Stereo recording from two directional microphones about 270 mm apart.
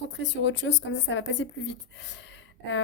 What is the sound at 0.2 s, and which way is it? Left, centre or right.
A woman's voice, left.